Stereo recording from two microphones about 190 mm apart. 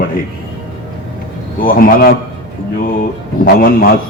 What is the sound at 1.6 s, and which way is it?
Speech, 45° left (ahead or behind).